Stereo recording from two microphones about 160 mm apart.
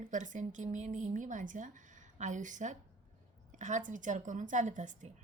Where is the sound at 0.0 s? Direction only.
50° right (ahead or behind).